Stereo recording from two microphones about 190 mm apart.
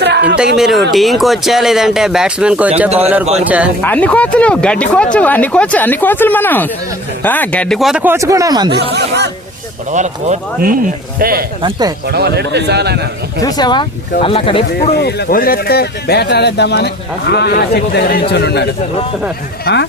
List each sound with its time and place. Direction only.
0.0 s a sound: 65° right (ahead or behind)
0.5 s speech: centre (ahead or behind)
3.8 s speech: 10° left (ahead or behind); by 8.7 s 20° right (ahead or behind)
9.0 s a man's voice: 65° right (ahead or behind)
9.9 s speech: 40° right (ahead or behind)
11.6 s speech: 20° right (ahead or behind)
12.0 s a man's voice: 60° right (ahead or behind)
13.4 s speech: 20° left (ahead or behind)
14.9 s speech: 60° left (ahead or behind)